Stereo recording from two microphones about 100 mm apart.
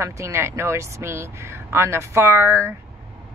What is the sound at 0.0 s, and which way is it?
Speech, 30° right (ahead or behind).